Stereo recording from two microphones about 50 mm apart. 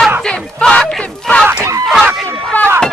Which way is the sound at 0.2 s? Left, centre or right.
Centre.